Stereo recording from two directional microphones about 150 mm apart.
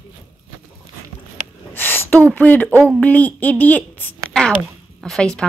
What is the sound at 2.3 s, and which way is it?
Speech, 10° left (ahead or behind).